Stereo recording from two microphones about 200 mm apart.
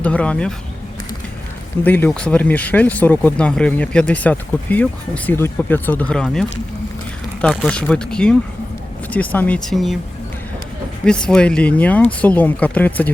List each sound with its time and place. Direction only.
0.0 s speech: 5° left (ahead or behind)
1.8 s speech: 10° left (ahead or behind)
7.4 s speech: 5° left (ahead or behind)
11.0 s speech: 5° left (ahead or behind)